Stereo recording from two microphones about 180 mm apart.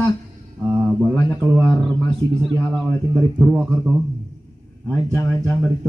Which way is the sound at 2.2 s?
25° right (ahead or behind).